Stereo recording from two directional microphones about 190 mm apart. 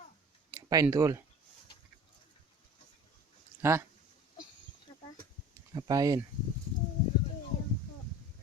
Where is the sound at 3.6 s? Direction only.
15° right (ahead or behind).